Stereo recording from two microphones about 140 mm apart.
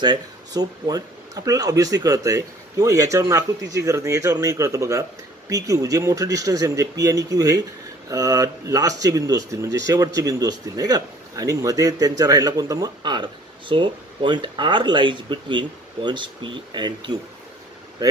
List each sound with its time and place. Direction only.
0.0 s speech: 30° right (ahead or behind)